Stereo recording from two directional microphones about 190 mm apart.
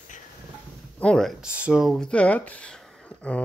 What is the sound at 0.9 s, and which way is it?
Speech, 5° left (ahead or behind).